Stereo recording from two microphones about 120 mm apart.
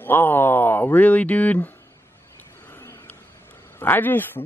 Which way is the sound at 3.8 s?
15° left (ahead or behind).